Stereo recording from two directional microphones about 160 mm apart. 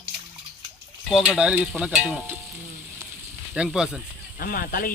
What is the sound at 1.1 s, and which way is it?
Stir, 5° right (ahead or behind).